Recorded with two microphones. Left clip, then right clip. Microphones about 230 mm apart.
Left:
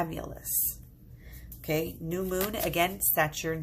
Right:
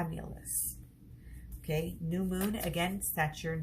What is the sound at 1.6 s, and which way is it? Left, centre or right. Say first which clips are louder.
Speech: left 6 dB; left.